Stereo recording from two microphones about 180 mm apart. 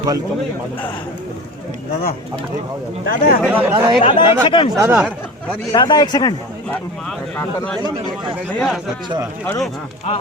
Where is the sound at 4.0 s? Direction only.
25° left (ahead or behind).